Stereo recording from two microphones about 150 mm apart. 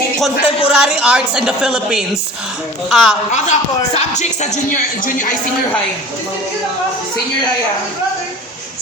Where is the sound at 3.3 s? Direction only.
55° left (ahead or behind).